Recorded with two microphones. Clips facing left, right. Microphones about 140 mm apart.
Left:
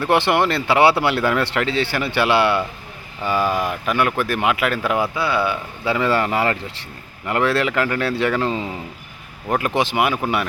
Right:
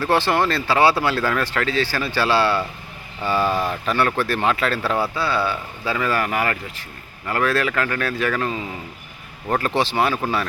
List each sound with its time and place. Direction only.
0.0 s speech: 20° left (ahead or behind)
9.5 s speech: 15° left (ahead or behind)